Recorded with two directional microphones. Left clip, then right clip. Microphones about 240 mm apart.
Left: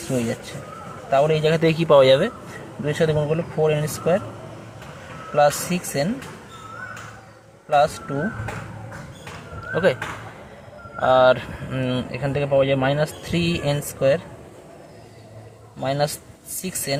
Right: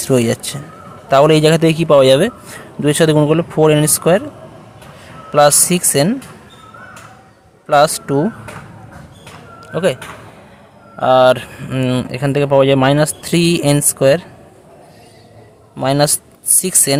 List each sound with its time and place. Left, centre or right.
0.2 s speech: right
5.3 s speech: right
7.7 s speech: right
9.6 s a sound: right
11.0 s speech: right
15.8 s speech: right